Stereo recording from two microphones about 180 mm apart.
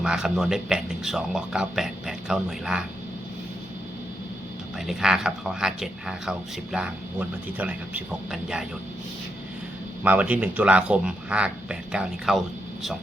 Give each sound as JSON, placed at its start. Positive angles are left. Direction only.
{"t": 0.0, "sound": "speech", "side_deg": 0}
{"t": 4.9, "sound": "speech", "side_deg": 0}
{"t": 10.0, "sound": "a man's voice", "side_deg": -10}